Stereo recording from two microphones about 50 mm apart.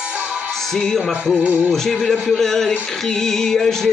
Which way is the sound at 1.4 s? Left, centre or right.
Right.